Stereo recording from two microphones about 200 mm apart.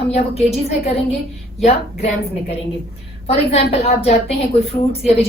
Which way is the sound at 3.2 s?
30° left (ahead or behind).